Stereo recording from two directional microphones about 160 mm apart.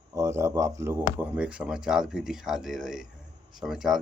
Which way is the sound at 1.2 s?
5° right (ahead or behind).